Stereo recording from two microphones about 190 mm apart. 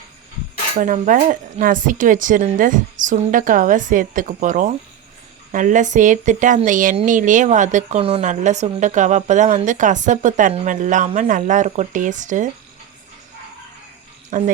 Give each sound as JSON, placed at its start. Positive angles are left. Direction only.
{"t": 0.8, "sound": "speech", "side_deg": -45}
{"t": 14.3, "sound": "speech", "side_deg": -40}